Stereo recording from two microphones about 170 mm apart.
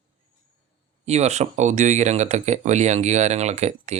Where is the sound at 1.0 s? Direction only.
40° right (ahead or behind).